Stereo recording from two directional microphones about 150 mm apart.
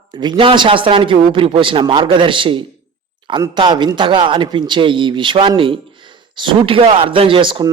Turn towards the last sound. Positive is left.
turn(degrees=-35)  # may be behind; listen again after turning